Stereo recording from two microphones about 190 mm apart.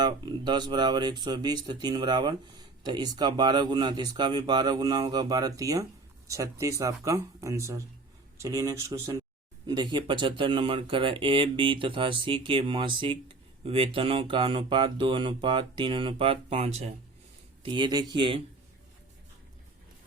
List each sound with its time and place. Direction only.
0.0 s speech: 20° right (ahead or behind)
17.6 s speech: 25° right (ahead or behind)